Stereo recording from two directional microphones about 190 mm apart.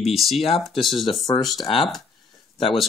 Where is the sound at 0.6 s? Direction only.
Centre (ahead or behind).